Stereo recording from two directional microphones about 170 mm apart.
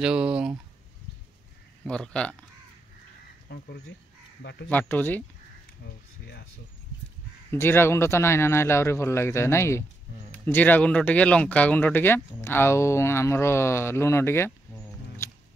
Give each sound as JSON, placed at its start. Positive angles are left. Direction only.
{"t": 0.0, "sound": "speech", "side_deg": -5}
{"t": 1.9, "sound": "speech", "side_deg": 5}
{"t": 3.4, "sound": "speech", "side_deg": 70}
{"t": 4.4, "sound": "speech", "side_deg": 80}
{"t": 4.6, "sound": "speech", "side_deg": 10}
{"t": 7.5, "sound": "speech", "side_deg": 15}
{"t": 15.2, "sound": "music", "side_deg": 15}